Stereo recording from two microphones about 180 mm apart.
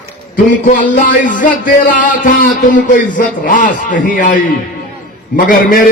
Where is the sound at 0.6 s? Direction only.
45° left (ahead or behind).